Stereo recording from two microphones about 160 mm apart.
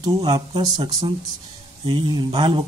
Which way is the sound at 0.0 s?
25° right (ahead or behind).